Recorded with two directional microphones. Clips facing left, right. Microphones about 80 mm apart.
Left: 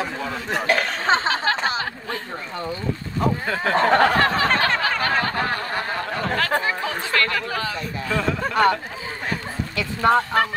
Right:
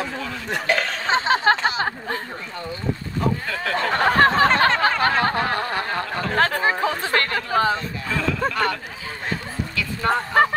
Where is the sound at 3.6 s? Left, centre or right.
Left.